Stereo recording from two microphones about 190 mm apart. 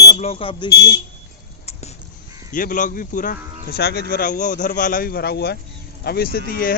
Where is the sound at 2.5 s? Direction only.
45° left (ahead or behind).